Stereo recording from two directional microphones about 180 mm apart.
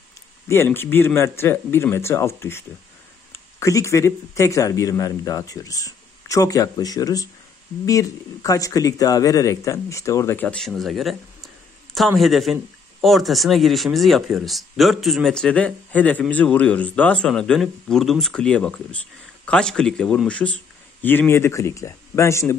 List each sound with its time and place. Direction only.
0.5 s a man's voice: 15° left (ahead or behind)